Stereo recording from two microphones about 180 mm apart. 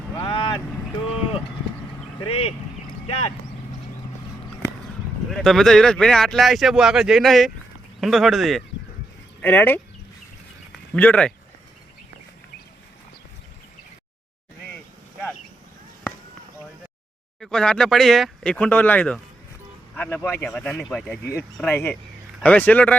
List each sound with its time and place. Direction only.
0.2 s boat: 25° left (ahead or behind)
2.1 s speech: 30° left (ahead or behind)
5.3 s speech: centre (ahead or behind)
10.9 s speech: 5° left (ahead or behind)
17.4 s speech: 5° left (ahead or behind)